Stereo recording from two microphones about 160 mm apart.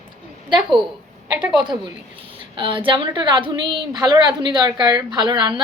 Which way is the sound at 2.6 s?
30° right (ahead or behind).